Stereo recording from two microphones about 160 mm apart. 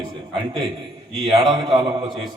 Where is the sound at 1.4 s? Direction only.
30° right (ahead or behind).